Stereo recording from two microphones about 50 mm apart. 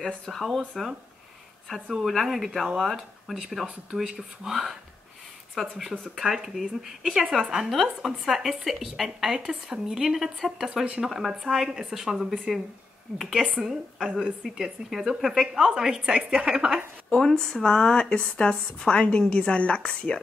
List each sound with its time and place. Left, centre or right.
0.3 s speech: centre
2.0 s speech: centre
3.6 s speech: centre
4.5 s speech: centre
17.1 s speech: centre